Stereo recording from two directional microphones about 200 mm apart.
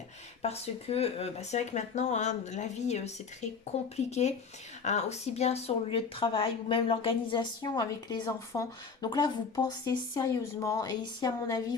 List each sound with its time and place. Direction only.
0.4 s speech: 30° left (ahead or behind)